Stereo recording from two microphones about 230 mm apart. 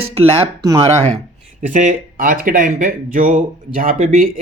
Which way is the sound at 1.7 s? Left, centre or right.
Right.